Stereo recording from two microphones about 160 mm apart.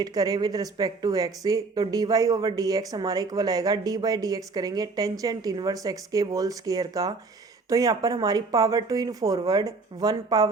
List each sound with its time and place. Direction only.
0.0 s speech: 25° right (ahead or behind)